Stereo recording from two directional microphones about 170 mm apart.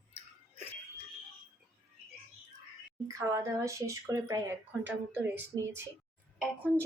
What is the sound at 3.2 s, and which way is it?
Speech, 20° right (ahead or behind).